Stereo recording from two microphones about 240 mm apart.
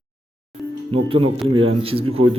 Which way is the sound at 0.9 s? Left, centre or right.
Right.